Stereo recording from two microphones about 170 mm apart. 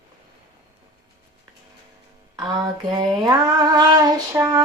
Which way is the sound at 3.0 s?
25° right (ahead or behind).